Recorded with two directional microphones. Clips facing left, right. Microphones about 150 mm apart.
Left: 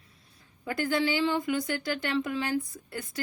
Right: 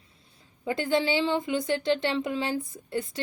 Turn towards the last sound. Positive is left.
turn(degrees=-25)  # may be behind; listen again after turning